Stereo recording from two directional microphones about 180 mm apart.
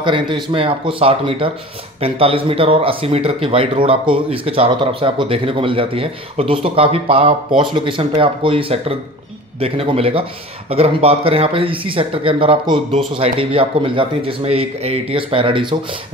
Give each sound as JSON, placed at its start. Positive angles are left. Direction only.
{"t": 0.0, "sound": "speech", "side_deg": -25}